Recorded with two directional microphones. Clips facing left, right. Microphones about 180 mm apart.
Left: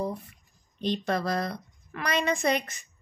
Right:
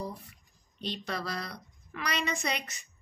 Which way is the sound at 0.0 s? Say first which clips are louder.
Left 7 dB; 50° left (ahead or behind).